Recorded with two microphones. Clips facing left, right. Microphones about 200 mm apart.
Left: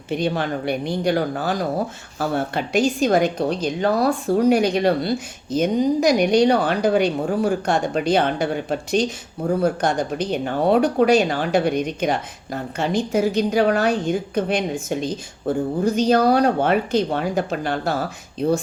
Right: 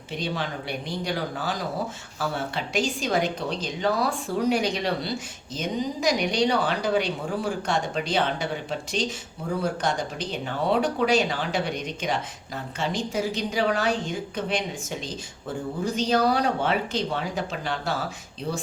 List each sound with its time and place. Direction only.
0.2 s speech: 55° left (ahead or behind)